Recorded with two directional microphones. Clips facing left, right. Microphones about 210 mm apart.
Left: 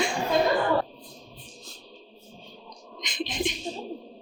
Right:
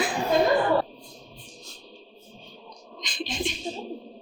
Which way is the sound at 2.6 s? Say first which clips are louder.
Even; 20° left (ahead or behind).